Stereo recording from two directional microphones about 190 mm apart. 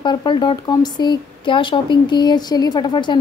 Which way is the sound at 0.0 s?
25° left (ahead or behind).